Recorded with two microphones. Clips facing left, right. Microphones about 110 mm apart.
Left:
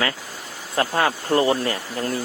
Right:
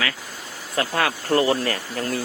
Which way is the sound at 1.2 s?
25° left (ahead or behind).